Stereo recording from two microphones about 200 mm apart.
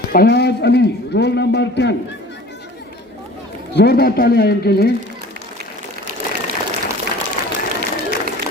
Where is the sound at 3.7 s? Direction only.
55° left (ahead or behind).